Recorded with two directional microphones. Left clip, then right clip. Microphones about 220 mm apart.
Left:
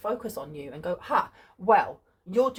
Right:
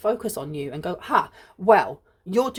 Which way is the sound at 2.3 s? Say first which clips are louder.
Right 1 dB; 55° right (ahead or behind).